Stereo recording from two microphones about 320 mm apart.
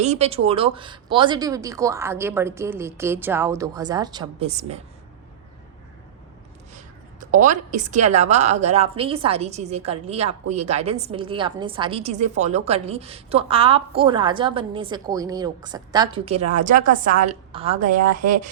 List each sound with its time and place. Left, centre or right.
0.0 s a woman's voice: centre
6.7 s a woman's voice: right